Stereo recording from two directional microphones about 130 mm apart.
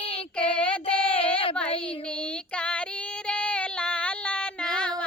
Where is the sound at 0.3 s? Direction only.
10° left (ahead or behind).